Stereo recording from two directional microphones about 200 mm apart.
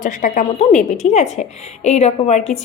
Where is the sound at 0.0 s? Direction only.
40° left (ahead or behind).